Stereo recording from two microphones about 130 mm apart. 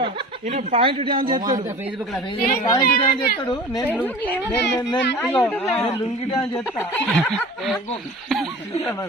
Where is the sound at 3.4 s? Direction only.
30° left (ahead or behind).